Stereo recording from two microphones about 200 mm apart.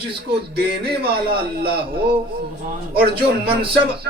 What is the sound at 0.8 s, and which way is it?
Speech, 50° right (ahead or behind).